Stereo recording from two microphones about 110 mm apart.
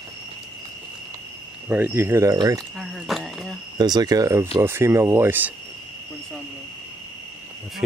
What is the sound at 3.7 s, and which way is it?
Speech, 40° right (ahead or behind).